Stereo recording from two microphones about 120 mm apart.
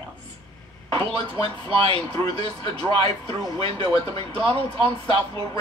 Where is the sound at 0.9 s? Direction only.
50° right (ahead or behind).